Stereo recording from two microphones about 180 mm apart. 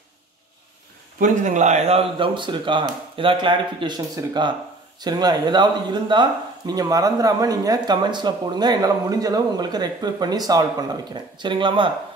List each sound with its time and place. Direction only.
1.2 s speech: 45° right (ahead or behind)